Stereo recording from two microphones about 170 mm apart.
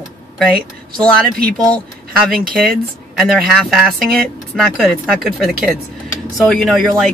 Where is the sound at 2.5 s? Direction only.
Centre (ahead or behind).